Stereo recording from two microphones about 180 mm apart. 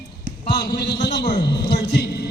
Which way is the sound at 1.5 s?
65° left (ahead or behind).